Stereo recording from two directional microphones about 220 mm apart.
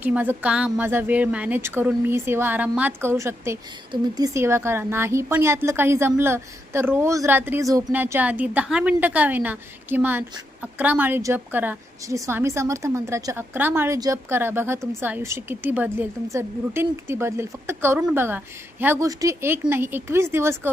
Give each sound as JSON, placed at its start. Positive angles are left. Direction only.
{"t": 0.0, "sound": "a woman's voice", "side_deg": -10}